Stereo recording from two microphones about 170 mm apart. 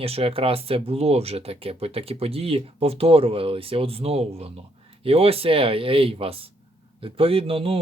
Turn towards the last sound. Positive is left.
turn(degrees=-35)  # may be behind; listen again after turning